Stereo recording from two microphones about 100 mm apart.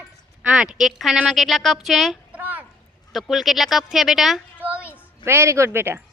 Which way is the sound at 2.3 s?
15° right (ahead or behind).